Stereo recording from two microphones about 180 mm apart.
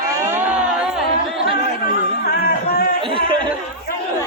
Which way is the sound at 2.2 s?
60° left (ahead or behind).